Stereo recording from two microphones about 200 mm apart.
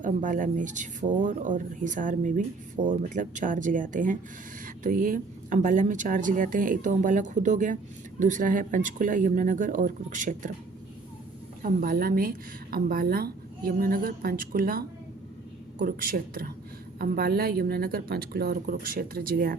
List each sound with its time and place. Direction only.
0.0 s a woman's voice: 40° right (ahead or behind)
11.6 s a woman's voice: 45° right (ahead or behind)